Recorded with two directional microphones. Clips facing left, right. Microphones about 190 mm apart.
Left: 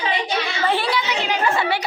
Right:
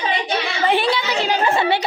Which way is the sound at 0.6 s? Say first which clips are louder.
Right 4 dB; 20° right (ahead or behind).